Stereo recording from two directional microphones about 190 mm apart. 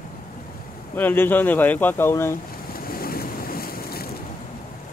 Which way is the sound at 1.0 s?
10° left (ahead or behind).